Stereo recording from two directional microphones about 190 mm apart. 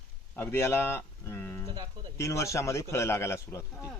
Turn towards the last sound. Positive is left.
turn(degrees=15)  # may be behind; listen again after turning